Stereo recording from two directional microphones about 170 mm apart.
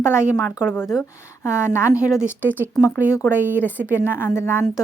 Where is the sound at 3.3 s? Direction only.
15° left (ahead or behind).